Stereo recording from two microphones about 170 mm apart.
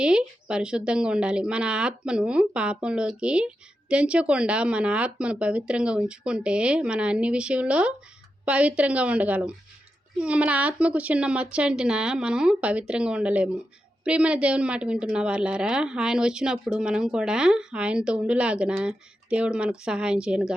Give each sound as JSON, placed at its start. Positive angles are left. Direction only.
{"t": 0.0, "sound": "a woman's voice", "side_deg": -5}